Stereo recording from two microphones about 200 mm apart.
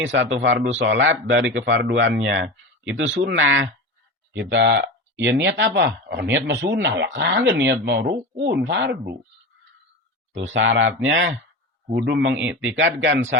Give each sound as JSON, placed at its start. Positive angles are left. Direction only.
{"t": 0.0, "sound": "speech", "side_deg": -70}
{"t": 10.3, "sound": "speech", "side_deg": -70}
{"t": 11.9, "sound": "speech", "side_deg": -55}